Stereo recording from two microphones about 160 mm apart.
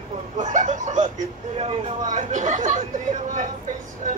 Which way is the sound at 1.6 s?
40° right (ahead or behind).